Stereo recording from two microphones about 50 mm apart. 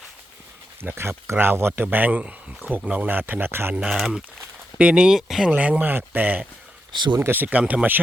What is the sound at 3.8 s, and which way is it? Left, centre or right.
Speech, centre.